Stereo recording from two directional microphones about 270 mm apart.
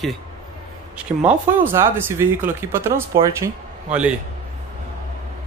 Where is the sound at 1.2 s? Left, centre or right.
Centre.